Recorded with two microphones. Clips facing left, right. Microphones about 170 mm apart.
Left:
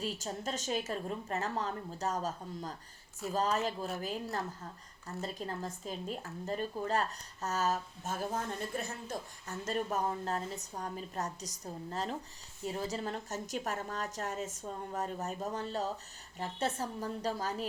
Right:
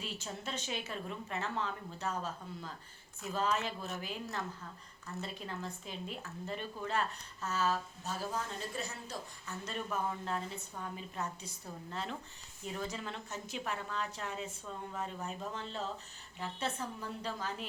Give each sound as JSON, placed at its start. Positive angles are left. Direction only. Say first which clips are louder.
{"t": 0.0, "sound": "a woman's voice", "louder": "left 5 dB", "side_deg": 40}